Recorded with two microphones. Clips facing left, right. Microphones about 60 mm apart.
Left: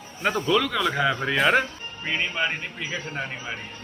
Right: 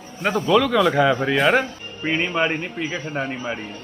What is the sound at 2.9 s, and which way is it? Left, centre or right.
Speech, centre.